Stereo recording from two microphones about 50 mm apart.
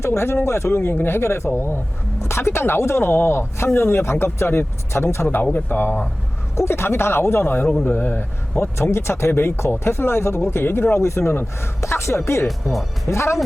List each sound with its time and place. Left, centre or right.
0.0 s speech: left
0.8 s speech: left
5.3 s speech: left
6.6 s speech: left